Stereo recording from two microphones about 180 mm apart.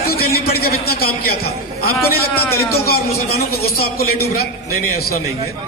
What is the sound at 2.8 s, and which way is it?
A man's voice, 60° left (ahead or behind).